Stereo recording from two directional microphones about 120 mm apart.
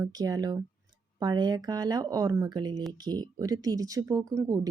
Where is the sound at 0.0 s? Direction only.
35° right (ahead or behind).